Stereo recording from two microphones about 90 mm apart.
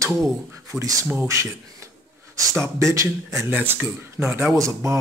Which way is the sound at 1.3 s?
35° right (ahead or behind).